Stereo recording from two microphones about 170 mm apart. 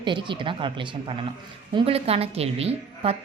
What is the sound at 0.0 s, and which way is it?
A woman's voice, 30° right (ahead or behind).